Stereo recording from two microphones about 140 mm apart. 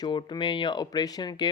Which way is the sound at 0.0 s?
35° left (ahead or behind).